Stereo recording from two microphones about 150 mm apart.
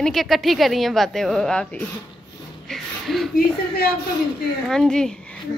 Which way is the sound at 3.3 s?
90° left.